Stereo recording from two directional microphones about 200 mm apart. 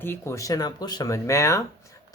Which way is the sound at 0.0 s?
10° left (ahead or behind).